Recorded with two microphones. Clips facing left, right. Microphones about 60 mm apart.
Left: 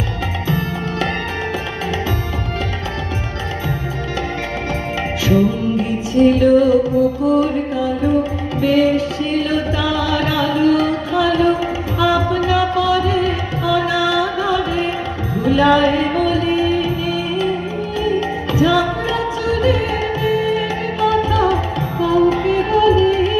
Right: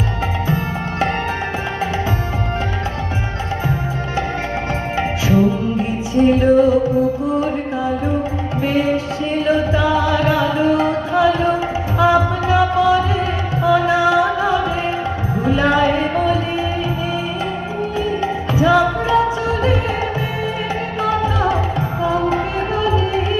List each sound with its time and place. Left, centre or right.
6.1 s music: right
8.6 s music: right